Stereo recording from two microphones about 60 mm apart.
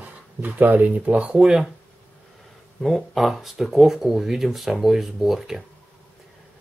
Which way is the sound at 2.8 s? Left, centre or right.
Centre.